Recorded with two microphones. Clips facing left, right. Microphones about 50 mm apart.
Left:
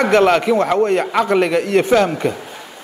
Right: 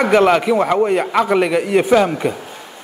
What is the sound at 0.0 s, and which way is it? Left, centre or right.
A man's voice, centre.